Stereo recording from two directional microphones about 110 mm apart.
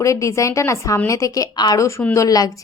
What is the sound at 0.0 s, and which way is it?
A woman's voice, 30° left (ahead or behind).